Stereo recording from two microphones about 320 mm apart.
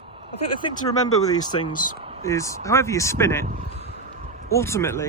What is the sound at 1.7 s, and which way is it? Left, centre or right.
Speech, left.